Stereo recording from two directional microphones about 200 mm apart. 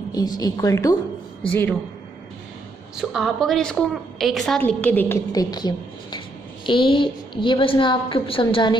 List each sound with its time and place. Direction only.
0.1 s a woman's voice: 20° left (ahead or behind)
3.0 s a woman's voice: centre (ahead or behind); by 8.7 s 25° left (ahead or behind)